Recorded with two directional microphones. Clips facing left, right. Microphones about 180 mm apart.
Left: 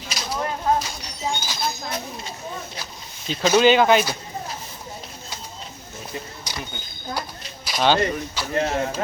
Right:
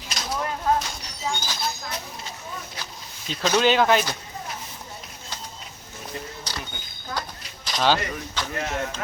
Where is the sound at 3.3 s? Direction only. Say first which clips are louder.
Left 4 dB; 5° left (ahead or behind).